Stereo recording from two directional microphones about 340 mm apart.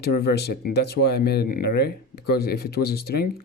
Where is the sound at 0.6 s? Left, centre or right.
Left.